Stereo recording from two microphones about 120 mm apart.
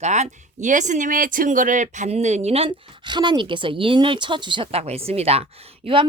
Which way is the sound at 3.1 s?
40° right (ahead or behind).